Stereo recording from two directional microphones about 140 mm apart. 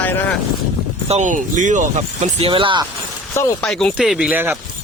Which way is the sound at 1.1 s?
65° right (ahead or behind).